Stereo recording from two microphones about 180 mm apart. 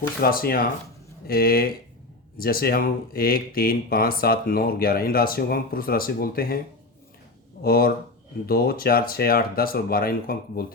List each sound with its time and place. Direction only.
0.2 s speech: 55° left (ahead or behind)
7.6 s speech: 55° left (ahead or behind)